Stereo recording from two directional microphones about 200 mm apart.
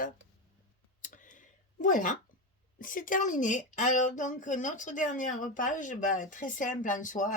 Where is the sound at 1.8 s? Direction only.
40° left (ahead or behind).